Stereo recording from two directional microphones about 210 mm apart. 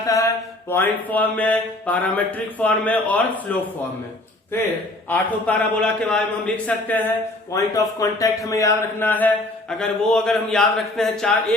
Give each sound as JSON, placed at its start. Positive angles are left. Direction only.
{"t": 0.0, "sound": "mantra", "side_deg": 15}
{"t": 5.0, "sound": "mantra", "side_deg": 5}
{"t": 7.5, "sound": "a man's voice", "side_deg": 15}